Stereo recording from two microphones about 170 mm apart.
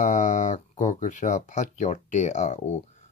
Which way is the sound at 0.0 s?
45° left (ahead or behind).